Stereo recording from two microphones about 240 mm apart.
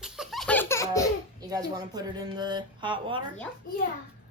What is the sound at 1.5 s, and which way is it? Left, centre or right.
Speech, centre.